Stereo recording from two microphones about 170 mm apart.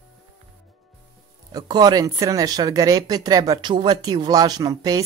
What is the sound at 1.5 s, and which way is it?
Speech, 25° right (ahead or behind).